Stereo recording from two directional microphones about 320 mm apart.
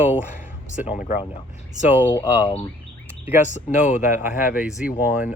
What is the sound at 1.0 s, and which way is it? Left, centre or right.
Speech, left.